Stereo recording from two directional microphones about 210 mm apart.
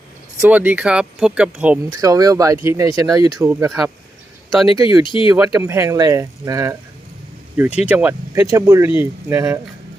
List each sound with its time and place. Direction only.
0.4 s speech: 10° right (ahead or behind)
2.0 s speech: 15° right (ahead or behind)
5.0 s speech: 25° left (ahead or behind)
5.3 s speech: 5° right (ahead or behind)